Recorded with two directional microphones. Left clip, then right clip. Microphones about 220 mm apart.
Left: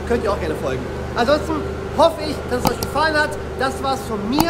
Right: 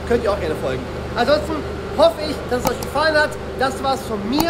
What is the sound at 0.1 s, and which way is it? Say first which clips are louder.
A man's voice: right 1 dB; 10° left (ahead or behind).